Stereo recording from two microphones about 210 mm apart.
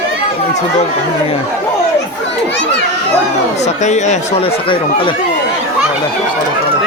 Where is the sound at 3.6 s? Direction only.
35° left (ahead or behind).